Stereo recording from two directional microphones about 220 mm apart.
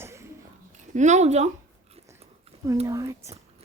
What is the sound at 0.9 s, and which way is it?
Speech, 30° right (ahead or behind).